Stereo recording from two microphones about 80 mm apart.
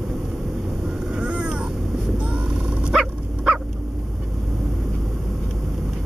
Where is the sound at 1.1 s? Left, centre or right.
Centre.